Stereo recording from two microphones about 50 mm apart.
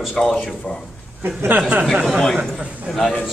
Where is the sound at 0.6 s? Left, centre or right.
Centre.